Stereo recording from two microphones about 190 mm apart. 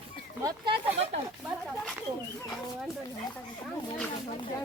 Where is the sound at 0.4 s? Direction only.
25° right (ahead or behind).